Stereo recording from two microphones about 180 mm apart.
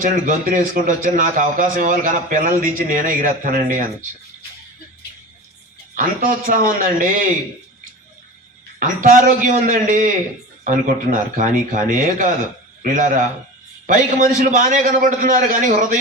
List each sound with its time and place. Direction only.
0.0 s a man's voice: 45° right (ahead or behind)
6.0 s a man's voice: 50° right (ahead or behind)
8.8 s a man's voice: 50° right (ahead or behind)